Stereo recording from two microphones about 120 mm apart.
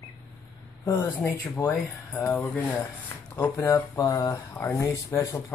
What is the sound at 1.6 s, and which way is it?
Speech, 35° left (ahead or behind).